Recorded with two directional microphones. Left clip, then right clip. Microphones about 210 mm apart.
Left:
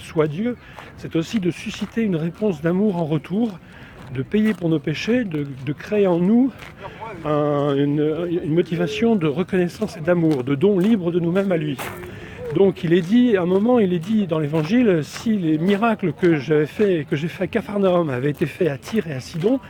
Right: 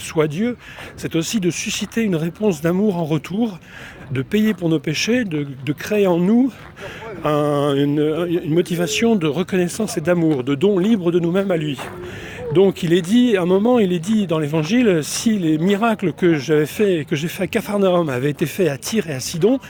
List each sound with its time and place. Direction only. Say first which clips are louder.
0.1 s speech: right 2 dB; 50° right (ahead or behind)